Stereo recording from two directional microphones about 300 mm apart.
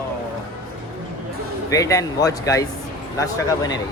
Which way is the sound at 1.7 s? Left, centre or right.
Centre.